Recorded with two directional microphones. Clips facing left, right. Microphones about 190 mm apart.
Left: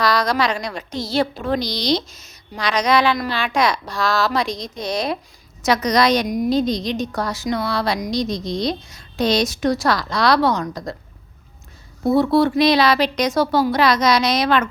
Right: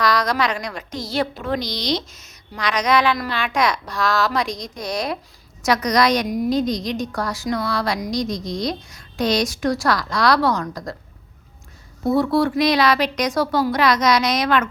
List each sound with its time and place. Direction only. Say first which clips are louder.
0.0 s speech: left 1 dB; 30° left (ahead or behind)
12.0 s speech: left 2 dB; 25° left (ahead or behind)